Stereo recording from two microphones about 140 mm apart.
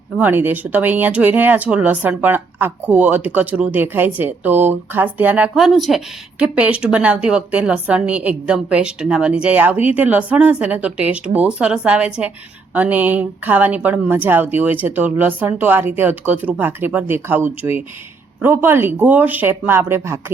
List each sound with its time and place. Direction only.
0.2 s a woman's voice: 15° right (ahead or behind)